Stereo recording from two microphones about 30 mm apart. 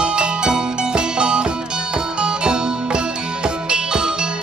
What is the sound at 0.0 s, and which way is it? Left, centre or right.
Music, right.